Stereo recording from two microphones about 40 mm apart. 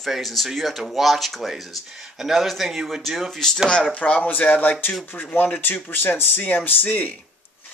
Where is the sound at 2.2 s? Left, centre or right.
Centre.